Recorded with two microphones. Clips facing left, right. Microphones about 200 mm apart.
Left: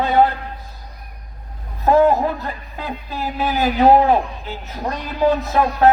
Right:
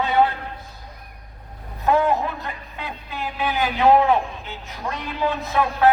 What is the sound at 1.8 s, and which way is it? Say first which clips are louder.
Speech: left 5 dB; 40° left (ahead or behind).